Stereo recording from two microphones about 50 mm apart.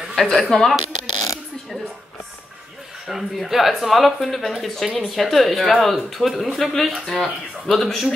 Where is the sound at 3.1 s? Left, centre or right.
Centre.